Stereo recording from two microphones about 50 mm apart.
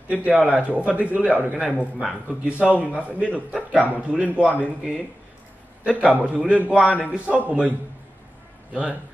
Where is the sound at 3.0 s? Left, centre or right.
Right.